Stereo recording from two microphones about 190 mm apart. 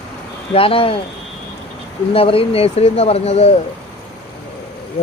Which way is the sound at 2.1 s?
30° left (ahead or behind).